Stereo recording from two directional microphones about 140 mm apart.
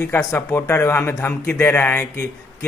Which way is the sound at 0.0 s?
20° left (ahead or behind).